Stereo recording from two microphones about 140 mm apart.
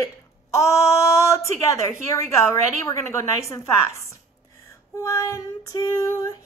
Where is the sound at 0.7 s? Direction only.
20° left (ahead or behind).